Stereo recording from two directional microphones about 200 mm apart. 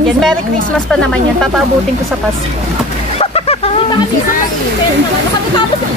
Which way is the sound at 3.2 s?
30° left (ahead or behind).